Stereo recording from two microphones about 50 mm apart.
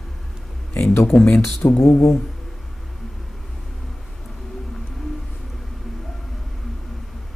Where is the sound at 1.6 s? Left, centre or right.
Left.